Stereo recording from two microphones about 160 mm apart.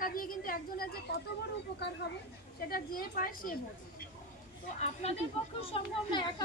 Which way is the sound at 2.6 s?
65° left (ahead or behind).